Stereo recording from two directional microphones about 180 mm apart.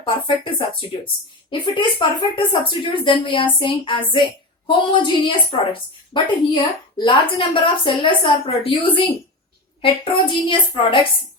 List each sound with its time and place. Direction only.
1.5 s a woman's voice: 25° left (ahead or behind)